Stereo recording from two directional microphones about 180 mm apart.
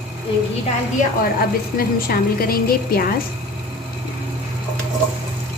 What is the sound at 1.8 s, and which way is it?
A woman's voice, 55° left (ahead or behind).